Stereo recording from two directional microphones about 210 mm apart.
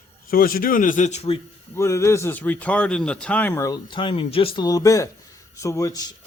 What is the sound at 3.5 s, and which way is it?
Speech, 15° left (ahead or behind).